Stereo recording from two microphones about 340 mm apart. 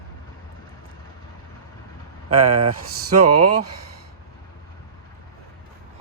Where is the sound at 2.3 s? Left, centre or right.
Right.